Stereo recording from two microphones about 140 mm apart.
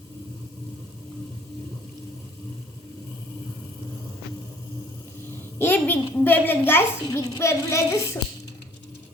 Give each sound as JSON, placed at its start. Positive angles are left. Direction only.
{"t": 5.5, "sound": "a child's voice", "side_deg": 15}